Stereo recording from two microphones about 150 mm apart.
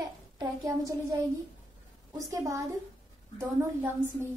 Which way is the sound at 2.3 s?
20° right (ahead or behind).